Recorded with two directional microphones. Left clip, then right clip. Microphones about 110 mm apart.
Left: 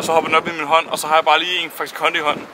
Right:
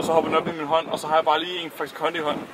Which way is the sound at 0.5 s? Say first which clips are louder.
Left 6 dB; 35° left (ahead or behind).